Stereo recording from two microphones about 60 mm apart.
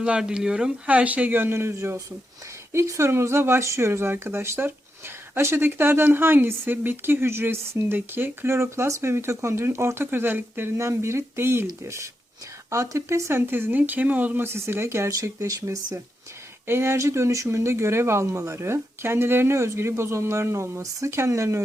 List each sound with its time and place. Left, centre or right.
0.0 s speech: centre
0.9 s speech: right
3.1 s speech: right
10.8 s speech: right
13.5 s speech: right
16.6 s speech: right